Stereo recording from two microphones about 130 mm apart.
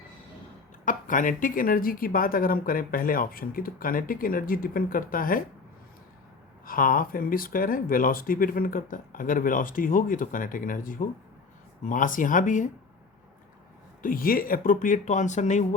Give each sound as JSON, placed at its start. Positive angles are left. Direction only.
{"t": 0.9, "sound": "speech", "side_deg": 90}
{"t": 6.7, "sound": "speech", "side_deg": 90}
{"t": 14.0, "sound": "speech", "side_deg": 90}